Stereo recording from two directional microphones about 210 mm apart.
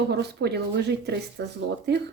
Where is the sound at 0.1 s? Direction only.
50° right (ahead or behind).